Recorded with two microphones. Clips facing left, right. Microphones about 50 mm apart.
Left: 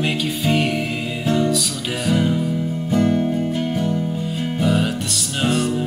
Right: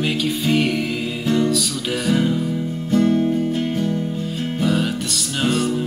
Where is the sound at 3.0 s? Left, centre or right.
Centre.